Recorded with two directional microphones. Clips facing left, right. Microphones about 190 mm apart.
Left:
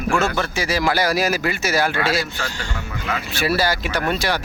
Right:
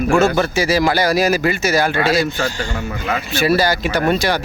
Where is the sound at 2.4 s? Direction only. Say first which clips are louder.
Right 7 dB; 40° right (ahead or behind).